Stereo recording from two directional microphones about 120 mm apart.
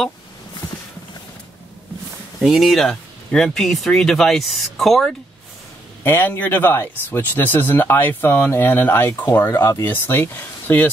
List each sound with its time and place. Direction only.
2.4 s speech: centre (ahead or behind)
6.0 s speech: 15° left (ahead or behind)